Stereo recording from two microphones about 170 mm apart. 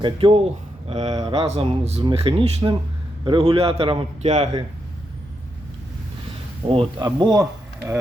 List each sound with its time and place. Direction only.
0.0 s speech: 30° right (ahead or behind)
0.9 s speech: 40° right (ahead or behind)
1.1 s speech: 20° right (ahead or behind)
1.4 s speech: 35° right (ahead or behind)
6.7 s speech: 30° right (ahead or behind)